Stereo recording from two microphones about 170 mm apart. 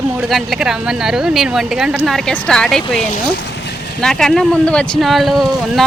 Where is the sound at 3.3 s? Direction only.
90° left.